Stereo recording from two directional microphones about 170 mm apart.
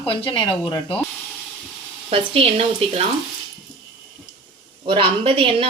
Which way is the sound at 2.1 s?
35° right (ahead or behind).